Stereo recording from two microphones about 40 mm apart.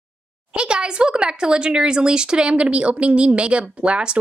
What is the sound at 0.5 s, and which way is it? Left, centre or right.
Speech, right.